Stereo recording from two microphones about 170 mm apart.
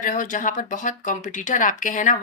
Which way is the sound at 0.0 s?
50° left (ahead or behind).